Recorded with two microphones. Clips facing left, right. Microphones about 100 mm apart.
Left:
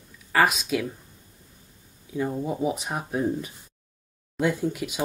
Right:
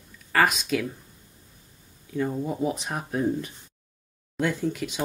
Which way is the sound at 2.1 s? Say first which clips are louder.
Even; 10° left (ahead or behind).